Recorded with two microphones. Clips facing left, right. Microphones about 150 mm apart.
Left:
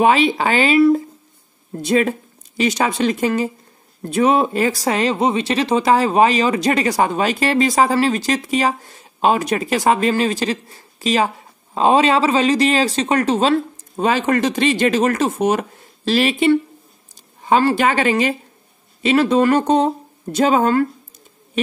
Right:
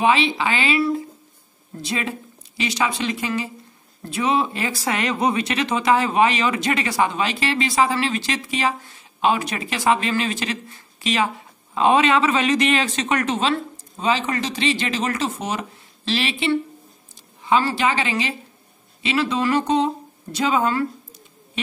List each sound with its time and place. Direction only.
0.0 s speech: 45° left (ahead or behind)